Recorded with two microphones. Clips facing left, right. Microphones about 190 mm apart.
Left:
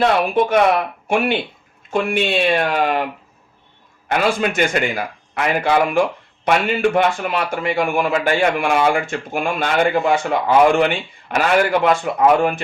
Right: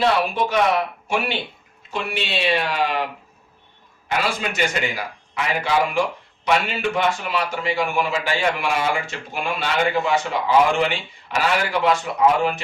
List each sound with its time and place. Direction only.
0.0 s a man's voice: 55° left (ahead or behind)
4.1 s a man's voice: 55° left (ahead or behind)